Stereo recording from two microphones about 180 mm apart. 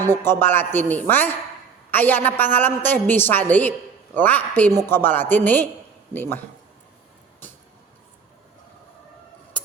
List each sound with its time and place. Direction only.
0.1 s a woman's voice: 10° left (ahead or behind)